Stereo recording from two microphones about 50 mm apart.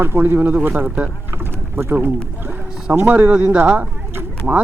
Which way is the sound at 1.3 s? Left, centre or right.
Right.